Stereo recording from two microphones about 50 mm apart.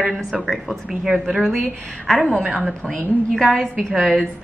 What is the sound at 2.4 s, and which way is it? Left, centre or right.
Speech, right.